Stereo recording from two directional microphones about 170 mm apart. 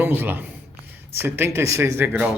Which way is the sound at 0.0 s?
10° right (ahead or behind).